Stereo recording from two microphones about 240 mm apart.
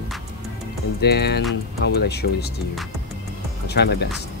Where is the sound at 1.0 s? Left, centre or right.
Left.